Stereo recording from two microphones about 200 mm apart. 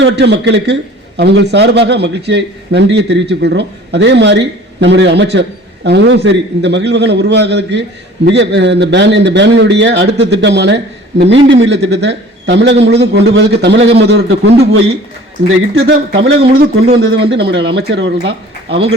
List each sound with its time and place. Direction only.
0.0 s a man's voice: 60° right (ahead or behind)
15.4 s a man's voice: 85° right; by 18.3 s 60° right (ahead or behind)
18.3 s speech: 30° right (ahead or behind)